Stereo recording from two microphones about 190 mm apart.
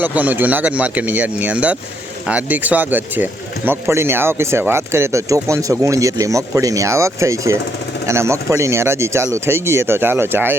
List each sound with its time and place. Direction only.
0.0 s speech: 10° right (ahead or behind)